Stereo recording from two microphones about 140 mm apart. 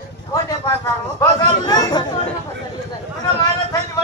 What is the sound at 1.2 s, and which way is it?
Speech, 30° left (ahead or behind).